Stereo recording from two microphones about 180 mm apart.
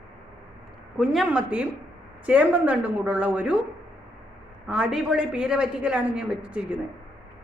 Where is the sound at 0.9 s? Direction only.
5° right (ahead or behind).